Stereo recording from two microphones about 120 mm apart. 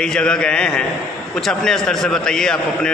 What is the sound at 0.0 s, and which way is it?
A man's voice, 5° left (ahead or behind).